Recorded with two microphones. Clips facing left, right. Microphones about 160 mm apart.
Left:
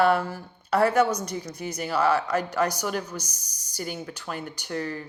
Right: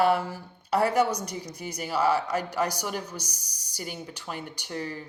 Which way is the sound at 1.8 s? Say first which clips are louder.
Left 1 dB; 55° left (ahead or behind).